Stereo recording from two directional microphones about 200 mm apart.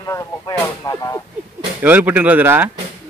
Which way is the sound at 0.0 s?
15° left (ahead or behind).